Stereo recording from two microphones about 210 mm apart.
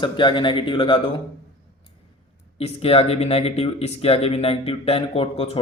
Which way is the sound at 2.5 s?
25° left (ahead or behind).